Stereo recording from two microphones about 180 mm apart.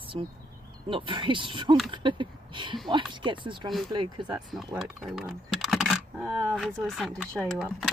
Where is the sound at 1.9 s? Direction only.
25° right (ahead or behind).